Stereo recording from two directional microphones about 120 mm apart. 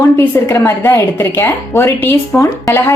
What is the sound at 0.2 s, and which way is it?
A woman's voice, 20° left (ahead or behind).